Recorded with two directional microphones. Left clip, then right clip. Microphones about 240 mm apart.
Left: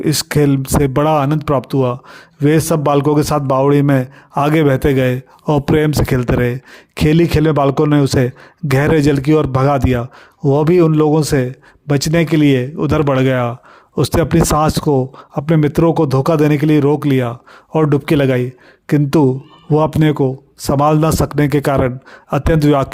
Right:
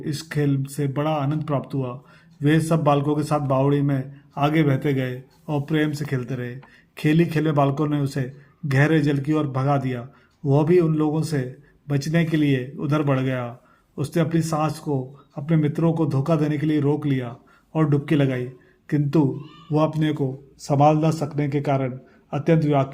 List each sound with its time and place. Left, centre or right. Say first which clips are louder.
0.0 s speech: left 12 dB; left